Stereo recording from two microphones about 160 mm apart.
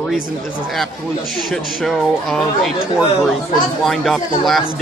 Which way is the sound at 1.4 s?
Centre (ahead or behind).